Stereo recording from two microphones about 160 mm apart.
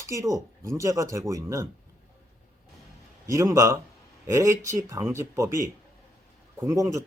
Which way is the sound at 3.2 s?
20° right (ahead or behind).